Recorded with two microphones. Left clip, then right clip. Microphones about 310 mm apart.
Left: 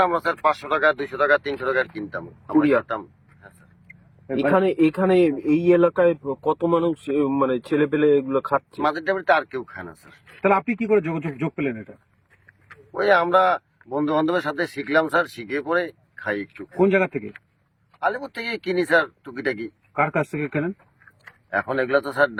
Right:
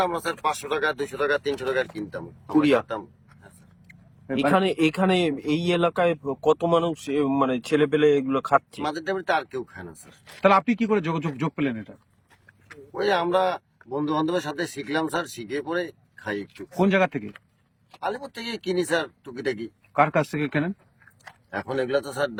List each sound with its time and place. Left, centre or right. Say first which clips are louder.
0.0 s speech: left 5 dB; centre
4.3 s speech: left 2 dB; centre